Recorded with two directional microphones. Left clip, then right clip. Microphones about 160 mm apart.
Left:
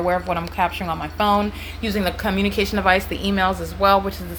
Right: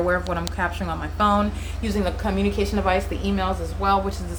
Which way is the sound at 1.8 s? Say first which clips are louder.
Left 3 dB; 20° left (ahead or behind).